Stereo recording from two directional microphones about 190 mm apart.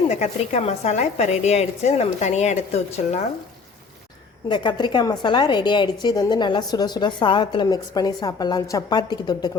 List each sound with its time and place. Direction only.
0.1 s a woman's voice: 35° left (ahead or behind)
4.4 s a woman's voice: 25° left (ahead or behind)